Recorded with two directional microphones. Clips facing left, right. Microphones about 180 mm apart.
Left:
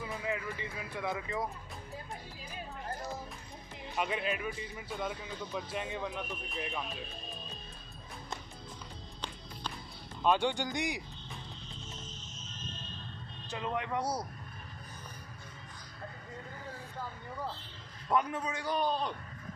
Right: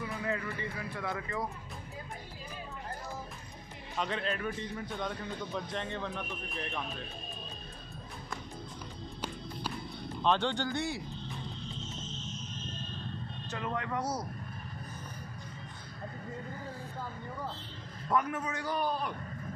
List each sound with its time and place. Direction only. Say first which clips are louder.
0.2 s speech: right 3 dB; 15° left (ahead or behind)
3.9 s a man's voice: even; 10° left (ahead or behind)
10.2 s a man's voice: left 1 dB; 10° left (ahead or behind)
13.5 s a man's voice: left 1 dB; 20° left (ahead or behind)
18.1 s a man's voice: even; 15° left (ahead or behind)